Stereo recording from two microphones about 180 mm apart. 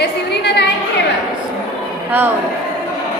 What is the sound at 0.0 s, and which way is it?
Music, 70° left (ahead or behind).